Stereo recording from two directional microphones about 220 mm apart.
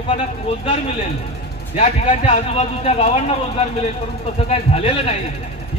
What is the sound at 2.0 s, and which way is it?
A man's voice, 25° left (ahead or behind).